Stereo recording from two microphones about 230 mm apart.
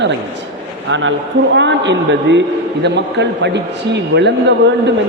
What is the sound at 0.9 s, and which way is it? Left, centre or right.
A man's voice, right.